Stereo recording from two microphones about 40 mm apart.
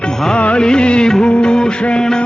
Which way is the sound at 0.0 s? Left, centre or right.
Centre.